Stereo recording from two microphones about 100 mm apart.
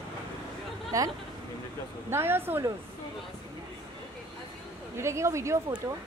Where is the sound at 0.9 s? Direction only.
35° right (ahead or behind).